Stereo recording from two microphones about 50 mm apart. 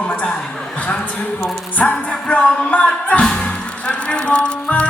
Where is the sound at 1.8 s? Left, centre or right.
Left.